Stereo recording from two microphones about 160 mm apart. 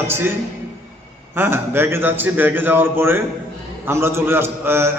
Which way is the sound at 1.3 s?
15° right (ahead or behind).